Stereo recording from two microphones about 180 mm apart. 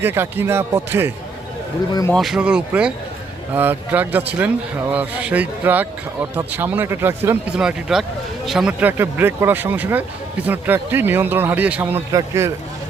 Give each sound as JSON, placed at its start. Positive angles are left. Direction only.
{"t": 0.0, "sound": "speech", "side_deg": -10}
{"t": 1.9, "sound": "speech", "side_deg": 20}
{"t": 2.1, "sound": "speech", "side_deg": 0}